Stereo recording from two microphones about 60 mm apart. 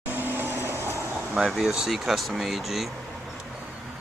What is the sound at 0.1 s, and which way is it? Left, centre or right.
Vehicle, right.